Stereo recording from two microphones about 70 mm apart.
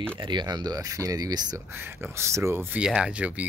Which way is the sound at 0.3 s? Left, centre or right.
Right.